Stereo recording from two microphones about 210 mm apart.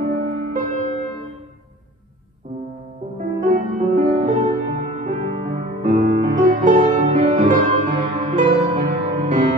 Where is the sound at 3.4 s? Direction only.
40° right (ahead or behind).